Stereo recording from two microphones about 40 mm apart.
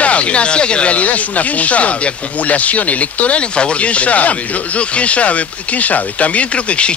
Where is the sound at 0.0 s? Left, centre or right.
Left.